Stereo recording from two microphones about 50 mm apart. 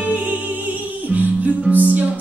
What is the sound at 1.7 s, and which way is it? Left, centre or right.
Music, right.